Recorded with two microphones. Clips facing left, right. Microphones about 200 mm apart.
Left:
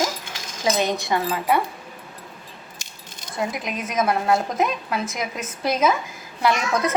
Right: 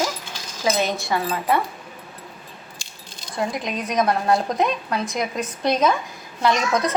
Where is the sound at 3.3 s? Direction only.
5° left (ahead or behind).